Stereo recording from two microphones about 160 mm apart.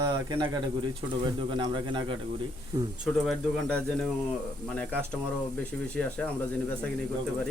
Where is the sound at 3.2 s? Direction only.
5° left (ahead or behind).